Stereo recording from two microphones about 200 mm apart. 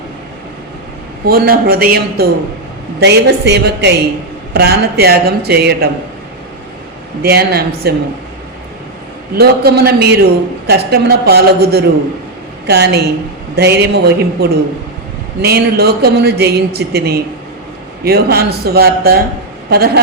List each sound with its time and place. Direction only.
1.2 s a man's voice: 50° right (ahead or behind)
7.2 s a man's voice: 50° right (ahead or behind)
9.3 s a man's voice: 50° right (ahead or behind)